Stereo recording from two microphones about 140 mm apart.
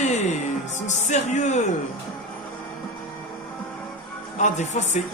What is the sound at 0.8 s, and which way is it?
Speech, 60° left (ahead or behind).